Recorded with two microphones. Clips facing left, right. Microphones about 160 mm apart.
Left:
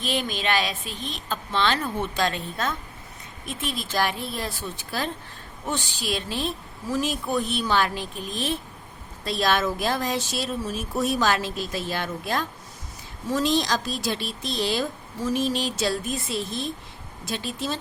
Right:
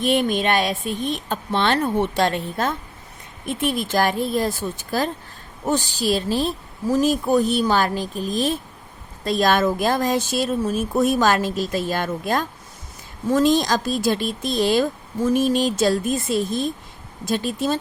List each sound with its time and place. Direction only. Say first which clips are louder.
0.0 s a woman's voice: right 8 dB; 55° right (ahead or behind)